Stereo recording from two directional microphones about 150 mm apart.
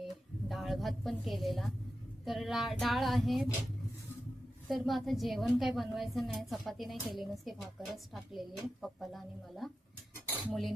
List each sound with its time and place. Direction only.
0.0 s a sound: centre (ahead or behind)
2.2 s a woman's voice: centre (ahead or behind)
4.7 s a woman's voice: centre (ahead or behind)